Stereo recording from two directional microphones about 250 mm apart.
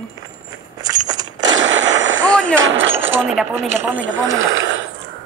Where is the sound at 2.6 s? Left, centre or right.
Right.